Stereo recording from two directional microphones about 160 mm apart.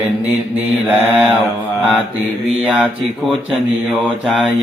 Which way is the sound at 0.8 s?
10° right (ahead or behind).